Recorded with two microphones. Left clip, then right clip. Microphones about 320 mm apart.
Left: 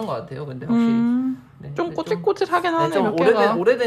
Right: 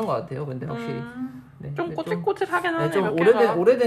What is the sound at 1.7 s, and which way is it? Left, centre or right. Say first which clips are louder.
Speech: left 4 dB; left.